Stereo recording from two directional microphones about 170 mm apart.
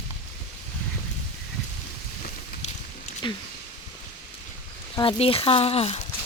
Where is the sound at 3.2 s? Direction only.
25° left (ahead or behind).